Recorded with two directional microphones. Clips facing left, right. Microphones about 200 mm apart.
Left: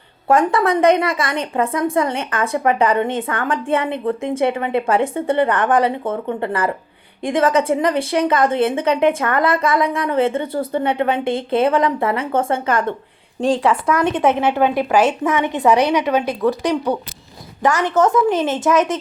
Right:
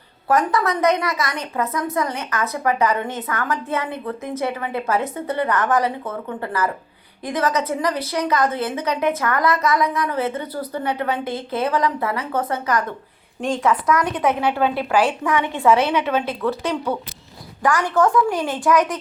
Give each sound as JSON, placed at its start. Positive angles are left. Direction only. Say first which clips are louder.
{"t": 0.3, "sound": "a woman's voice", "louder": "left 4 dB", "side_deg": 30}